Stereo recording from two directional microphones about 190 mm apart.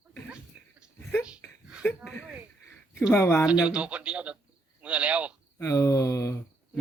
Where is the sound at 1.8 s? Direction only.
10° left (ahead or behind).